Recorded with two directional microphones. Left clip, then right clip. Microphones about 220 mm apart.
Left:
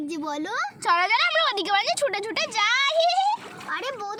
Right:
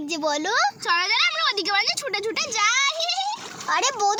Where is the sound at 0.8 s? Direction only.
40° left (ahead or behind).